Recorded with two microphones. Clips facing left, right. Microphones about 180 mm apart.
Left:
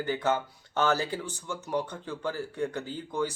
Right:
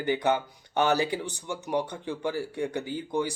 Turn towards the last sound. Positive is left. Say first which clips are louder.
# right 2 dB
turn(degrees=-15)  # may be behind; listen again after turning